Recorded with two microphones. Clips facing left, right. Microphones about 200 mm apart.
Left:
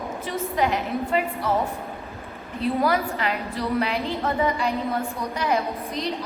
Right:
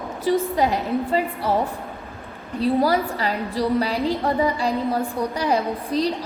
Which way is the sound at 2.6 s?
30° right (ahead or behind).